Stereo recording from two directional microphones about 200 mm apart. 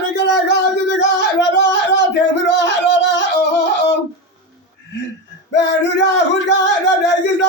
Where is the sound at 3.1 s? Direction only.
60° left (ahead or behind).